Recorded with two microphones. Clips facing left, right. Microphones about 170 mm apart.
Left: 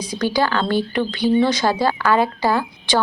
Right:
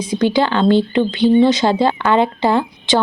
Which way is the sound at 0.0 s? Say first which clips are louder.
Right 4 dB; 25° right (ahead or behind).